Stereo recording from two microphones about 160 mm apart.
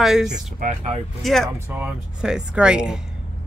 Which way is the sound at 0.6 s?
45° right (ahead or behind).